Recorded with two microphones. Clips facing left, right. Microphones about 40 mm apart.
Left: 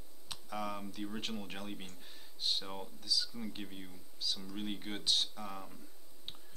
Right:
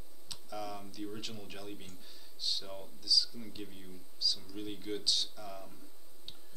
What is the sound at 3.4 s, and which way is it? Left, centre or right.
Speech, left.